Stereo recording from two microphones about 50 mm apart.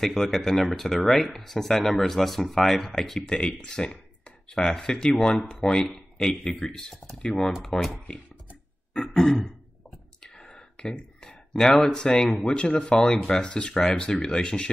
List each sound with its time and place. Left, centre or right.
0.0 s speech: centre
3.2 s speech: centre
8.9 s throat clearing: centre
10.5 s a sound: centre
12.4 s speech: centre